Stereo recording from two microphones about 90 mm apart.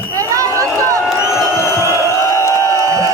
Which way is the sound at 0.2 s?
35° right (ahead or behind).